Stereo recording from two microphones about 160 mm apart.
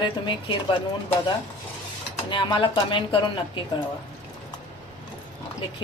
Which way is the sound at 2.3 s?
30° left (ahead or behind).